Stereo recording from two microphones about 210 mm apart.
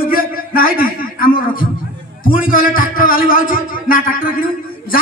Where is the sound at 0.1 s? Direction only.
45° left (ahead or behind).